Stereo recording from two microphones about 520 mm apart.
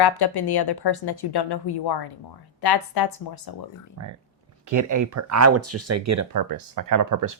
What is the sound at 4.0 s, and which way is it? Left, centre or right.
Speech, right.